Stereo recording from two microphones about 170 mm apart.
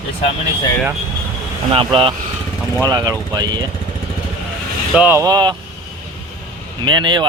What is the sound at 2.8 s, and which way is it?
Speech, 20° right (ahead or behind).